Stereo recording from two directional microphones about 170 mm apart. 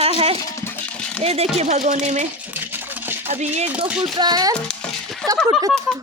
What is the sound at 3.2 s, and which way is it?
Speech, 40° right (ahead or behind).